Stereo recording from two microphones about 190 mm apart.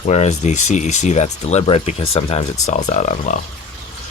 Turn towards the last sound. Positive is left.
turn(degrees=40)  # may be behind; listen again after turning